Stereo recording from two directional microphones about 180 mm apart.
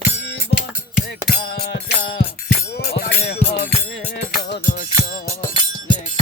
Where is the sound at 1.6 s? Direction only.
60° left (ahead or behind).